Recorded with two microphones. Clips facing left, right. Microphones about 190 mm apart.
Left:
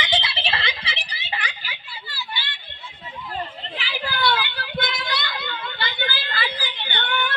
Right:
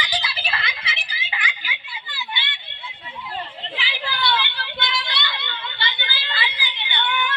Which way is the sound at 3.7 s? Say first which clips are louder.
Left 1 dB; 45° left (ahead or behind).